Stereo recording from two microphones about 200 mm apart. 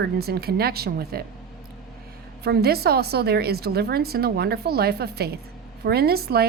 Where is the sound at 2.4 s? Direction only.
50° right (ahead or behind).